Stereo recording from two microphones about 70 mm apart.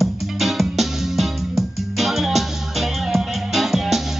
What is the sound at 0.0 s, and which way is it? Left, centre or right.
Music, centre.